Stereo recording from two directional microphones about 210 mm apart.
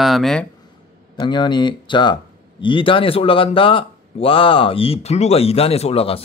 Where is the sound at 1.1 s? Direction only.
20° left (ahead or behind).